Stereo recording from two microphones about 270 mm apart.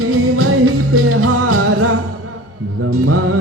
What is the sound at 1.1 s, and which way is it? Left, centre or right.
Music, right.